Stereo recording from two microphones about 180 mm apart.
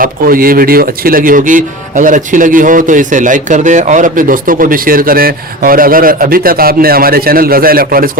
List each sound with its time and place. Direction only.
0.0 s speech: 50° right (ahead or behind)